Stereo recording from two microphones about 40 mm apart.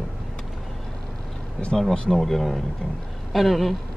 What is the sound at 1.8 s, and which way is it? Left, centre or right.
Speech, centre.